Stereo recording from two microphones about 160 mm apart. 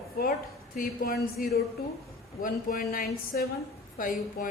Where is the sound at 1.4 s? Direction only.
60° left (ahead or behind).